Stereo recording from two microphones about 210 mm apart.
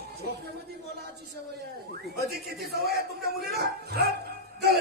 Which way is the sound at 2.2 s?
50° right (ahead or behind).